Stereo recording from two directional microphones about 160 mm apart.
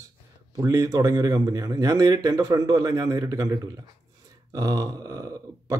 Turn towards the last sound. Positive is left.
turn(degrees=-25)  # may be behind; listen again after turning